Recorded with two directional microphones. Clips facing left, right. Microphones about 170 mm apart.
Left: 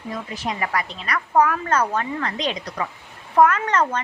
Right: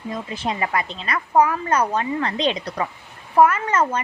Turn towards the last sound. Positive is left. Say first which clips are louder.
# even
turn(degrees=-10)  # may be behind; listen again after turning